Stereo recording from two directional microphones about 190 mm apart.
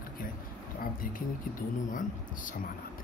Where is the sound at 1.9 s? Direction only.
45° left (ahead or behind).